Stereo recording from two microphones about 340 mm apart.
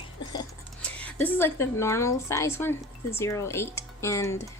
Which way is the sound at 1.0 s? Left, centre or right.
Centre.